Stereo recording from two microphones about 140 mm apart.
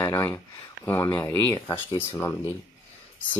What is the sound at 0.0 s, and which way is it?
Speech, 20° left (ahead or behind).